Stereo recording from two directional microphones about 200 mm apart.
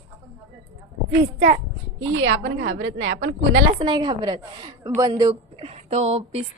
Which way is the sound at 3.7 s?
25° right (ahead or behind).